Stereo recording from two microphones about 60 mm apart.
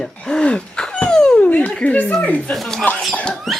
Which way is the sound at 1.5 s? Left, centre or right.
Left.